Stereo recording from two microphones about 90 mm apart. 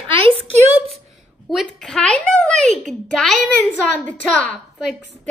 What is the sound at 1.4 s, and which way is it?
A child's voice, 5° left (ahead or behind).